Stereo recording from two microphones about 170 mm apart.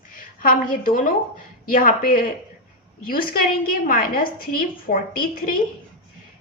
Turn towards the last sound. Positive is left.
turn(degrees=55)  # may be behind; listen again after turning